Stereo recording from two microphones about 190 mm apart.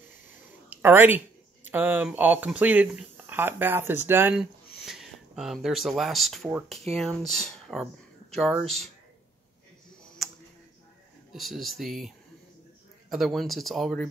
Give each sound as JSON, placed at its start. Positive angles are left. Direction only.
{"t": 0.7, "sound": "speech", "side_deg": -10}
{"t": 11.3, "sound": "speech", "side_deg": 0}
{"t": 13.1, "sound": "speech", "side_deg": 0}